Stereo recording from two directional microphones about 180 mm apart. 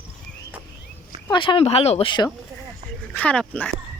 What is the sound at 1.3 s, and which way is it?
Speech, 25° left (ahead or behind).